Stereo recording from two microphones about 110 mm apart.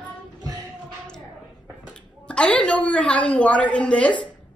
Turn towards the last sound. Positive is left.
turn(degrees=10)  # may be behind; listen again after turning